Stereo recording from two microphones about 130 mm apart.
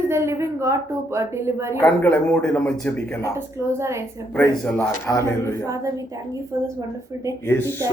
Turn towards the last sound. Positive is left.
turn(degrees=15)  # may be behind; listen again after turning